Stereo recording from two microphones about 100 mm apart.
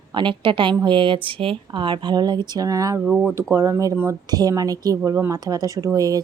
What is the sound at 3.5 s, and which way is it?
Speech, 25° right (ahead or behind).